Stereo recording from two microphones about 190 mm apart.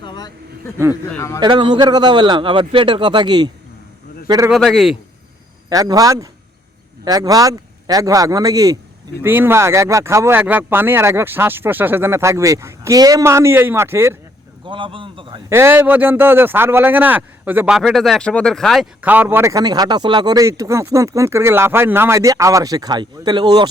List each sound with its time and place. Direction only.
0.0 s vehicle: 25° left (ahead or behind)
1.1 s a man's voice: 15° left (ahead or behind)
1.4 s a man's voice: 25° right (ahead or behind)
4.5 s a man's voice: centre (ahead or behind)
5.6 s a man's voice: 20° right (ahead or behind)
14.6 s a man's voice: 25° right (ahead or behind)
15.4 s speech: 15° right (ahead or behind)